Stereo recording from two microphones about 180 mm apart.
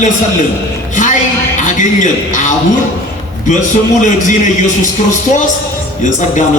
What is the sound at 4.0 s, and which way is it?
Speech, 45° left (ahead or behind).